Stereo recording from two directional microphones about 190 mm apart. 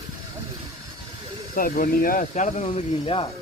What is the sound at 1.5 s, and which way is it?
Speech, 50° left (ahead or behind).